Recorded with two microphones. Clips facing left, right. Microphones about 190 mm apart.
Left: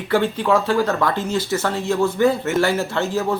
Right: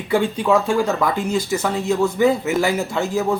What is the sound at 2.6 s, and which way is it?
Speech, 15° right (ahead or behind).